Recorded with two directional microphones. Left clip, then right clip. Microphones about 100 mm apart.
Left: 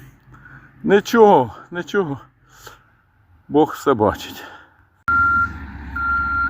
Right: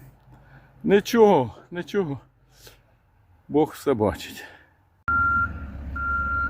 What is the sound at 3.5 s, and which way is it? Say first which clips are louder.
Speech: left 6 dB; centre (ahead or behind).